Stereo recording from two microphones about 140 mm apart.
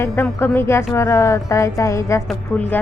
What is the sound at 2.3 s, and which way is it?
Speech, 10° left (ahead or behind).